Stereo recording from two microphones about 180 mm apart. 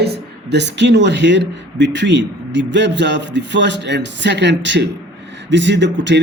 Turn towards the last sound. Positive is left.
turn(degrees=-80)